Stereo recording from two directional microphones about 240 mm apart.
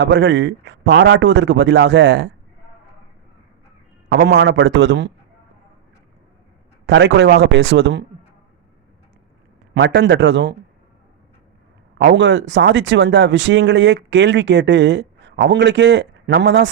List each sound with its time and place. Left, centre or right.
0.0 s speech: right
4.1 s speech: right
6.8 s speech: right
9.7 s speech: right
11.9 s speech: right